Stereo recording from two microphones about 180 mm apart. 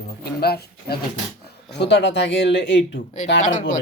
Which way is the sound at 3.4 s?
45° left (ahead or behind).